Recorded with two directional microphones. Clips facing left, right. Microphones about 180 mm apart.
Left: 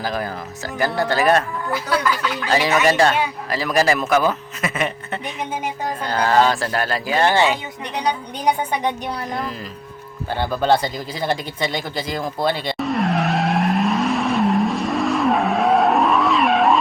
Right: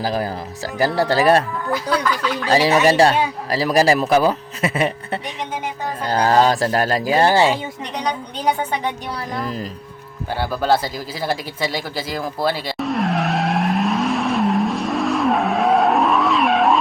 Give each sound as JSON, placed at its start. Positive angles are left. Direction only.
{"t": 0.0, "sound": "speech", "side_deg": -35}
{"t": 1.7, "sound": "speech", "side_deg": 5}
{"t": 2.5, "sound": "speech", "side_deg": -35}
{"t": 10.3, "sound": "a sound", "side_deg": -5}